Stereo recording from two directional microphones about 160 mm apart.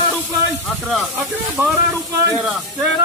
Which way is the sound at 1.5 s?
15° right (ahead or behind).